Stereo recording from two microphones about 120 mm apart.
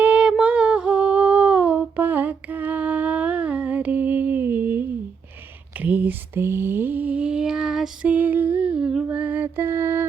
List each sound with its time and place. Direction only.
0.0 s humming: 10° right (ahead or behind)
5.7 s lullaby: 15° right (ahead or behind)
9.0 s music: 10° right (ahead or behind)